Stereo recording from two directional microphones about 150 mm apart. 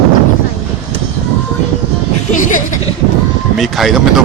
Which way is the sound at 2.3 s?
60° left (ahead or behind).